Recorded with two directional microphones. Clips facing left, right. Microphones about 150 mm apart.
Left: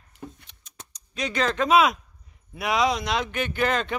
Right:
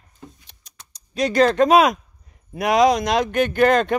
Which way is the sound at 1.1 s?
40° right (ahead or behind).